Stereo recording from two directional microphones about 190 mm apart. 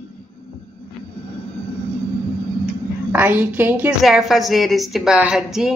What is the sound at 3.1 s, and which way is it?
Speech, 10° right (ahead or behind).